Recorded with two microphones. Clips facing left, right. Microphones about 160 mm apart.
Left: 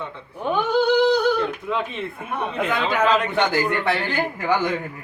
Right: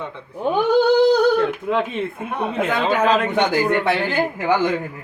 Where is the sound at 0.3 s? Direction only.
35° right (ahead or behind).